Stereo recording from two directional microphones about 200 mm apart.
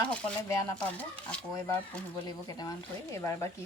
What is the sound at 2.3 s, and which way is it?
Speech, 20° left (ahead or behind).